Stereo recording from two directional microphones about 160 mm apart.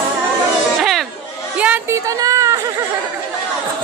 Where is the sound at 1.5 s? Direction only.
10° right (ahead or behind).